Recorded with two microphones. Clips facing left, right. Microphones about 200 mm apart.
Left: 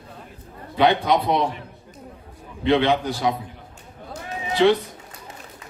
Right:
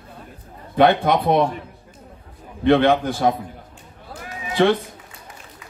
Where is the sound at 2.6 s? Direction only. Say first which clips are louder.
Right 3 dB; 50° right (ahead or behind).